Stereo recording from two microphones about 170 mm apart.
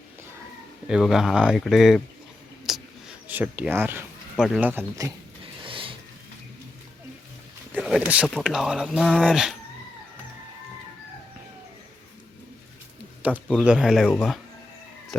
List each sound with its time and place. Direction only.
0.9 s speech: 5° right (ahead or behind)
2.7 s a sound: centre (ahead or behind)
3.2 s speech: 10° right (ahead or behind)
5.6 s a sound: 30° right (ahead or behind)
7.9 s speech: 5° right (ahead or behind)
13.5 s speech: 5° right (ahead or behind)
14.1 s speech: 10° left (ahead or behind)
15.1 s music: 5° left (ahead or behind)